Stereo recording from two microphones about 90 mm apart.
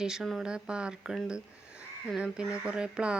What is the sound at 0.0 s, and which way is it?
Speech, 5° right (ahead or behind).